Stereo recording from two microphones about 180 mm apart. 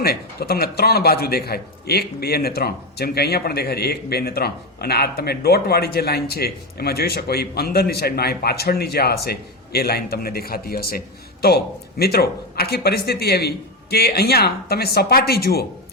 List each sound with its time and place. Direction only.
0.0 s a man's voice: 60° left (ahead or behind)